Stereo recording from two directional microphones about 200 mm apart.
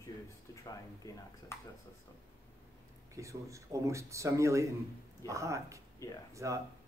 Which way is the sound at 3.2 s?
15° right (ahead or behind).